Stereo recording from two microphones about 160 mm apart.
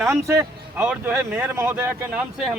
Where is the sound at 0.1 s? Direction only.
15° right (ahead or behind).